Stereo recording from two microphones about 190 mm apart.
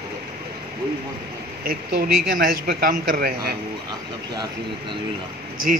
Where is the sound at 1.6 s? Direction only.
50° right (ahead or behind).